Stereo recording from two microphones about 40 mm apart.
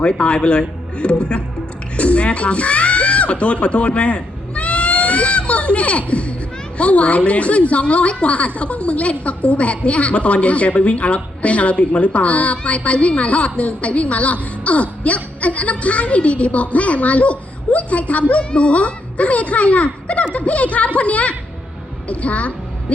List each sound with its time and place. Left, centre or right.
0.0 s a woman's voice: left